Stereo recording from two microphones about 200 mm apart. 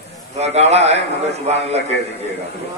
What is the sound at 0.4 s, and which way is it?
Speech, 30° right (ahead or behind).